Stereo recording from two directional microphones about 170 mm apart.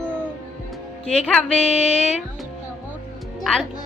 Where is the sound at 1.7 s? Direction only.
40° left (ahead or behind).